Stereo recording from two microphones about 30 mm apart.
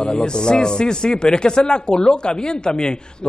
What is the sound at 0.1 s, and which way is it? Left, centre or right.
A man's voice, left.